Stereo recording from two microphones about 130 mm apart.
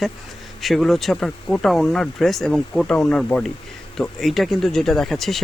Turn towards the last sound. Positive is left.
turn(degrees=0)  # may be behind; listen again after turning